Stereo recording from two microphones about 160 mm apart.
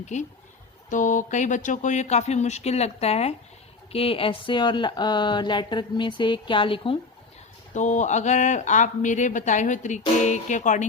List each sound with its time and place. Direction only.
0.0 s speech: 50° left (ahead or behind)
7.7 s speech: 50° left (ahead or behind)